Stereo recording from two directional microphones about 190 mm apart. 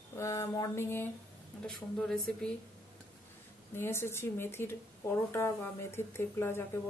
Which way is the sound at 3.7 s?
15° left (ahead or behind).